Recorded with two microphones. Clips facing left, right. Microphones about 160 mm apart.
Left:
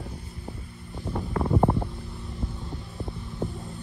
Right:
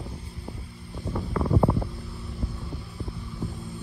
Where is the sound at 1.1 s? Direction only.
20° left (ahead or behind).